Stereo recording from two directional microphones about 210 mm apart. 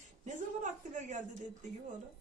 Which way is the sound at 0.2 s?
35° right (ahead or behind).